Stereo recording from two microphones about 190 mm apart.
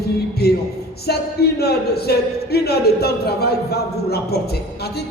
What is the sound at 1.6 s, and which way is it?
Speech, 55° left (ahead or behind).